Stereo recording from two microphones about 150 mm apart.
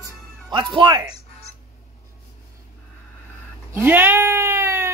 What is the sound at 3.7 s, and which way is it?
Speech, 15° right (ahead or behind).